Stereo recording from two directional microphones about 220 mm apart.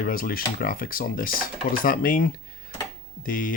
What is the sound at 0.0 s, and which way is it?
Speech, 40° left (ahead or behind).